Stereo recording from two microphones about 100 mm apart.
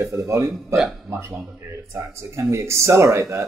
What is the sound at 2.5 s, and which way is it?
Speech, 30° right (ahead or behind).